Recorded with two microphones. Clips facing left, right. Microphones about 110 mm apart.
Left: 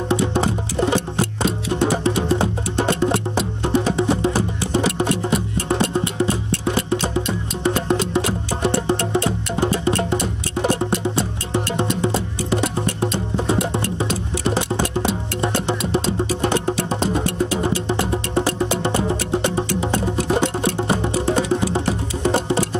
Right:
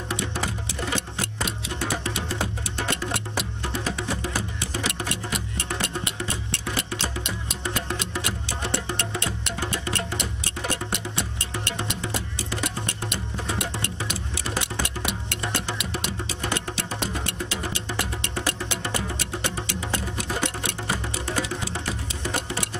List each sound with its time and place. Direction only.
0.1 s music: 25° left (ahead or behind)